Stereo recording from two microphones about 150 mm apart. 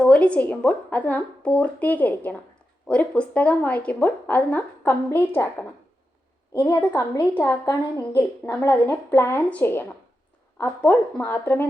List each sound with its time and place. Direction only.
0.0 s a woman's voice: 5° left (ahead or behind)
6.9 s a woman's voice: 25° left (ahead or behind)